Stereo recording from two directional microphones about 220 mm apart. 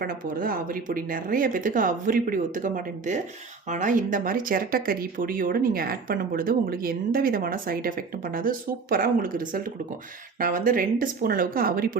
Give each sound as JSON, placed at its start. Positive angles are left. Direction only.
{"t": 0.0, "sound": "speech", "side_deg": -40}